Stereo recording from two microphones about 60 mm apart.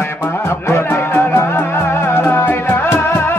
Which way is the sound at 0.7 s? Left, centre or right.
Left.